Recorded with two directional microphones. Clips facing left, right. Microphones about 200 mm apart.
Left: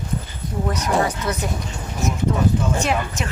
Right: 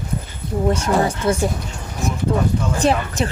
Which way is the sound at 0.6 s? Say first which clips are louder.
Right 3 dB; 25° right (ahead or behind).